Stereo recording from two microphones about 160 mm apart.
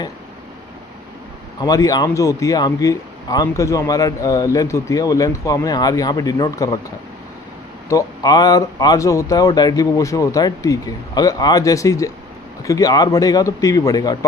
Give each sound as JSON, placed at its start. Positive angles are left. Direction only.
{"t": 1.6, "sound": "speech", "side_deg": 25}
{"t": 7.9, "sound": "speech", "side_deg": 20}